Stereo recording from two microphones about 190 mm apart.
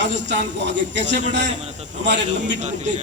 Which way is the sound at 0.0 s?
70° right (ahead or behind).